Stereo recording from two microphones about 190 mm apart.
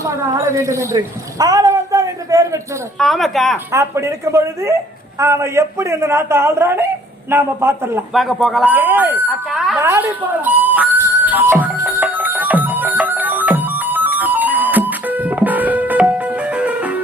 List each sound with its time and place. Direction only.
0.0 s a woman's voice: 15° right (ahead or behind)
3.0 s speech: centre (ahead or behind)
3.7 s speech: 15° right (ahead or behind)
8.1 s a sound: centre (ahead or behind)